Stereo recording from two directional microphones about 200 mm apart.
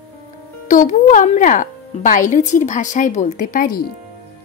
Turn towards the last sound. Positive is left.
turn(degrees=40)  # may be behind; listen again after turning